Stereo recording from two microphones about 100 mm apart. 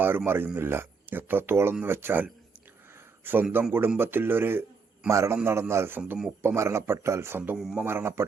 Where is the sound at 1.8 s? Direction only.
20° right (ahead or behind).